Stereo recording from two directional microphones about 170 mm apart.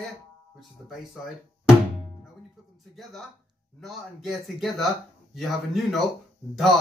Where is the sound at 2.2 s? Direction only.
Centre (ahead or behind).